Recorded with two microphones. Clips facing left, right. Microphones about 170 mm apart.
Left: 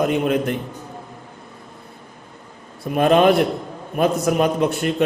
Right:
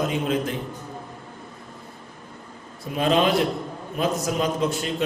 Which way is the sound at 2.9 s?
55° left (ahead or behind).